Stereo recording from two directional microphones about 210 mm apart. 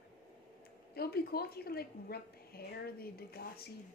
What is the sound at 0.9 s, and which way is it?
A woman's voice, 45° left (ahead or behind).